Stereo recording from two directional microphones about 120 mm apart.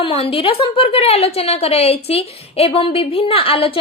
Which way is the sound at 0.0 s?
50° left (ahead or behind).